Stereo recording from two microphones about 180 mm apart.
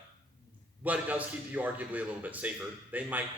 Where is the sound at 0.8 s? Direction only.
10° right (ahead or behind).